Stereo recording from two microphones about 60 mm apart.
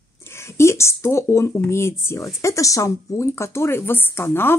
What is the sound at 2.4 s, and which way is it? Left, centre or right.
Speech, left.